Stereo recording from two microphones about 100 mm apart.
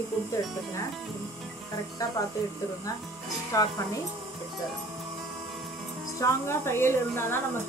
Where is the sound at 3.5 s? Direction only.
30° left (ahead or behind).